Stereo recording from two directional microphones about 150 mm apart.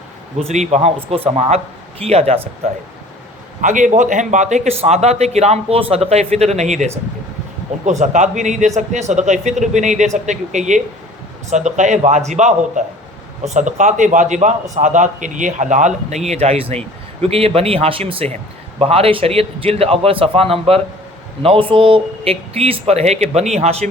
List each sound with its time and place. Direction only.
0.3 s a man's voice: 45° right (ahead or behind)
3.6 s a man's voice: 60° right (ahead or behind)